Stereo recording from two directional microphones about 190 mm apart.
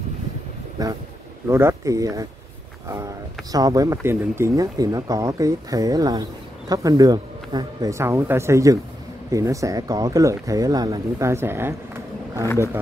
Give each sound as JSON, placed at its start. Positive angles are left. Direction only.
{"t": 0.8, "sound": "speech", "side_deg": -20}
{"t": 3.5, "sound": "speech", "side_deg": -20}